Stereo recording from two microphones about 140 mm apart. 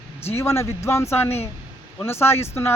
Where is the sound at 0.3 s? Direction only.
20° left (ahead or behind).